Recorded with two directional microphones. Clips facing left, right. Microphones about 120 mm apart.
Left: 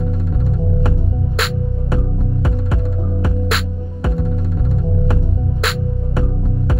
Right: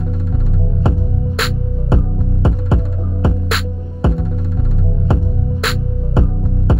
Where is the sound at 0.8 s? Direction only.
25° right (ahead or behind).